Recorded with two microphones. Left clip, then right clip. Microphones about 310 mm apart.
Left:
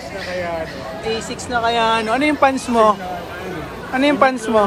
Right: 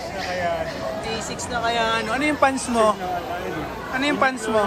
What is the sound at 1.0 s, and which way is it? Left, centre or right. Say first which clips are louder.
Speech: left 4 dB; centre.